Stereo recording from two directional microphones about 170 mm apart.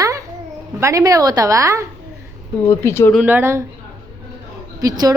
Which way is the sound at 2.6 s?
15° left (ahead or behind).